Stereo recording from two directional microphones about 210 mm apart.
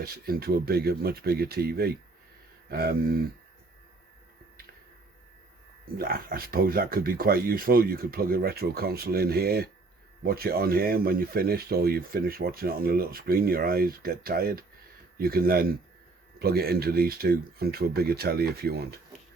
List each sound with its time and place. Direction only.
0.0 s speech: 45° right (ahead or behind)
6.0 s speech: 45° right (ahead or behind)